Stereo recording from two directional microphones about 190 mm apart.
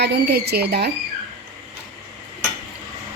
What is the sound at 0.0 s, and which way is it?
Speech, 60° right (ahead or behind).